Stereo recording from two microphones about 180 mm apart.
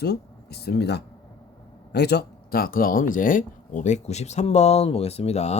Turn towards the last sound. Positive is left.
turn(degrees=35)  # may be behind; listen again after turning